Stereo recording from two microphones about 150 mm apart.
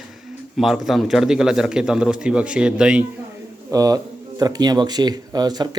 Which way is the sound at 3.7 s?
25° right (ahead or behind).